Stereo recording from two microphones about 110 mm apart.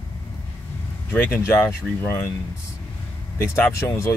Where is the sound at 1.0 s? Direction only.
15° left (ahead or behind).